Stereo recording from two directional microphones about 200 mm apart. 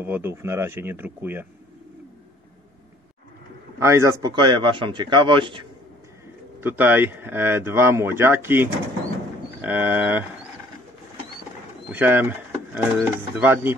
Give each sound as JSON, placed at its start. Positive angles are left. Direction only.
{"t": 0.0, "sound": "speech", "side_deg": -10}
{"t": 3.8, "sound": "a man's voice", "side_deg": -15}
{"t": 6.6, "sound": "speech", "side_deg": -10}
{"t": 11.9, "sound": "speech", "side_deg": -10}